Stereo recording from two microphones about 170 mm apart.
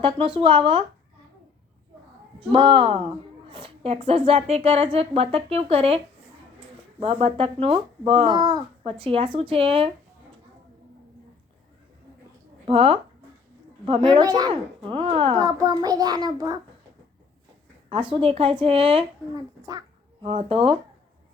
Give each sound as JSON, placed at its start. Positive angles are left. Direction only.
{"t": 0.0, "sound": "a woman's voice", "side_deg": -30}
{"t": 2.6, "sound": "a woman's voice", "side_deg": -30}
{"t": 7.0, "sound": "a woman's voice", "side_deg": -35}
{"t": 12.6, "sound": "a woman's voice", "side_deg": -30}
{"t": 15.4, "sound": "speech", "side_deg": -20}
{"t": 17.8, "sound": "a woman's voice", "side_deg": -30}
{"t": 20.2, "sound": "a woman's voice", "side_deg": -35}